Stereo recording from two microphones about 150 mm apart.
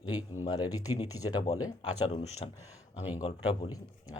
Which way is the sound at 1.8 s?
40° left (ahead or behind).